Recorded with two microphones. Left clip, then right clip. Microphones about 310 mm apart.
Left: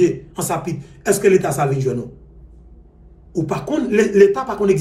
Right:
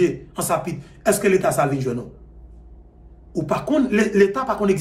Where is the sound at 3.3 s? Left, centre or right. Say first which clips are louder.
Right 1 dB; centre.